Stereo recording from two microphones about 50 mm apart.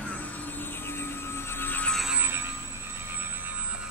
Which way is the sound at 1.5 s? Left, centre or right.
Left.